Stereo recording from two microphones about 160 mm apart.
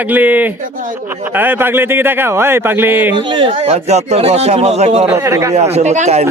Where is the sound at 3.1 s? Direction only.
30° right (ahead or behind).